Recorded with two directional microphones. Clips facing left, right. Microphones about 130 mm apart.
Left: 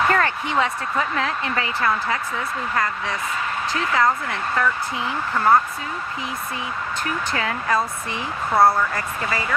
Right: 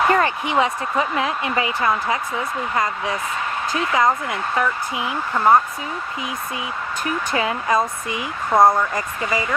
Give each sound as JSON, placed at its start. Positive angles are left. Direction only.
{"t": 0.1, "sound": "speech", "side_deg": -15}
{"t": 7.3, "sound": "speech", "side_deg": -20}